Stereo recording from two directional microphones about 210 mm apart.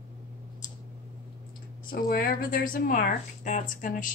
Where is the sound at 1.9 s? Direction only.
45° left (ahead or behind).